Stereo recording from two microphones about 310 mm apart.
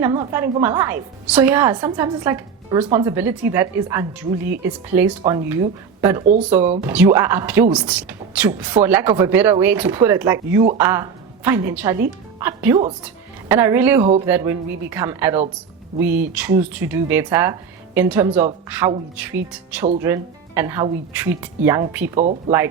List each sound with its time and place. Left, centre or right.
0.0 s a woman's voice: centre
22.2 s speech: right